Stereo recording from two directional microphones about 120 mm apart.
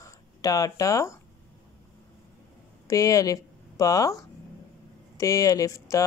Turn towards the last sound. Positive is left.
turn(degrees=30)  # may be behind; listen again after turning